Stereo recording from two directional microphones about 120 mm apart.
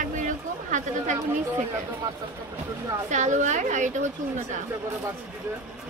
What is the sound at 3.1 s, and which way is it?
Speech, 90° right.